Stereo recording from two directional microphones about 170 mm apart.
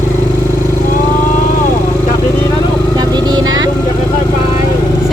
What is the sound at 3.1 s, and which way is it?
Vehicle, 25° right (ahead or behind).